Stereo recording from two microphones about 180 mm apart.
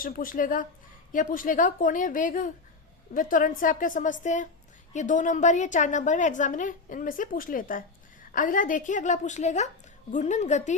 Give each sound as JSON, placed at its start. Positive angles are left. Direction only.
{"t": 0.0, "sound": "a woman's voice", "side_deg": 50}